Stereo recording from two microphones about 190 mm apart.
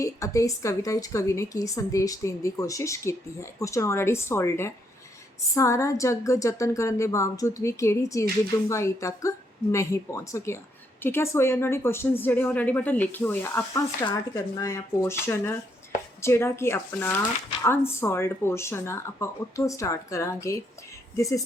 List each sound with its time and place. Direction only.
0.0 s a woman's voice: 15° left (ahead or behind)
16.2 s a woman's voice: 15° left (ahead or behind)